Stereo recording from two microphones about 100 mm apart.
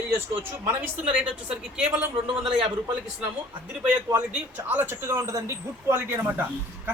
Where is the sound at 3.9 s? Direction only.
15° right (ahead or behind).